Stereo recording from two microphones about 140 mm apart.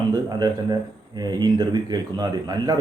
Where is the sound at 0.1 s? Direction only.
30° right (ahead or behind).